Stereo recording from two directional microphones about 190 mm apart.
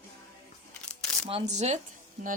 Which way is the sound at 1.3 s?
35° right (ahead or behind).